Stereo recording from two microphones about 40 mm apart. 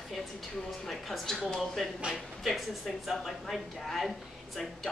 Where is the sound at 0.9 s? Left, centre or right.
Centre.